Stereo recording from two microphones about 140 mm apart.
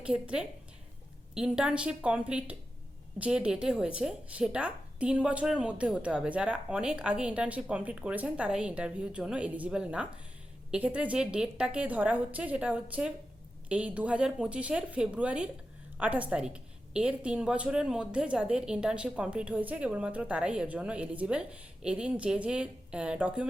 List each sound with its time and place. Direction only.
0.0 s a woman's voice: 5° right (ahead or behind)